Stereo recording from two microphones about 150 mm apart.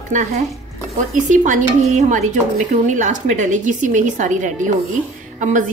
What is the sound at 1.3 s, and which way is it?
A woman's voice, 55° right (ahead or behind).